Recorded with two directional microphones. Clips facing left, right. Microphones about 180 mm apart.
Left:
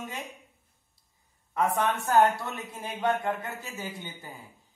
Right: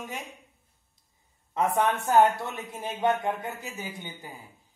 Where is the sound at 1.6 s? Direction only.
20° right (ahead or behind).